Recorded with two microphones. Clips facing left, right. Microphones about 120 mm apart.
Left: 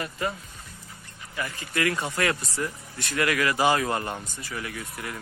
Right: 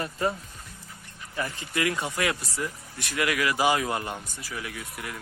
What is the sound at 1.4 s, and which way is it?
Speech, 25° right (ahead or behind).